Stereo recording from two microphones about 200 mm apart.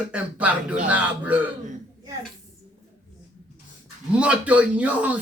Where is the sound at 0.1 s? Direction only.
5° right (ahead or behind).